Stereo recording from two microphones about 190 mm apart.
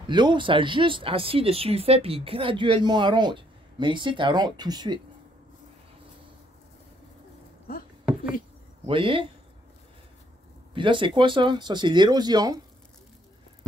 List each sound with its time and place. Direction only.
0.0 s speech: 25° right (ahead or behind)
8.8 s speech: 25° right (ahead or behind)
10.7 s speech: 25° right (ahead or behind)